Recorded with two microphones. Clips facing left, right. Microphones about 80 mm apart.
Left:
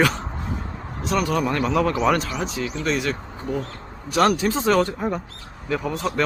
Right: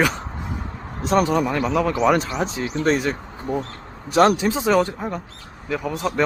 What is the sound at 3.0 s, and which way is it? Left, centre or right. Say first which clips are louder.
Speech: right 1 dB; right.